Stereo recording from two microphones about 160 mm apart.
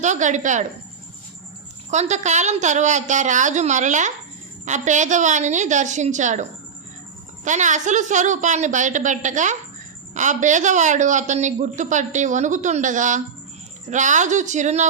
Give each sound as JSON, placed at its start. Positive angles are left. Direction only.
{"t": 0.0, "sound": "speech", "side_deg": -50}
{"t": 1.9, "sound": "speech", "side_deg": -45}